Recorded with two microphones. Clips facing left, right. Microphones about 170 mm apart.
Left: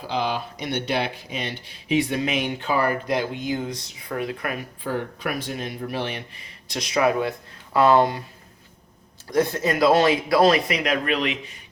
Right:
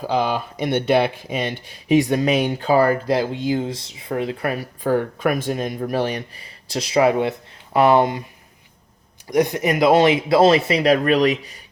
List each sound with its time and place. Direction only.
0.1 s speech: 50° right (ahead or behind)
6.7 s speech: 30° right (ahead or behind)
9.3 s speech: 15° right (ahead or behind); by 11.5 s 40° right (ahead or behind)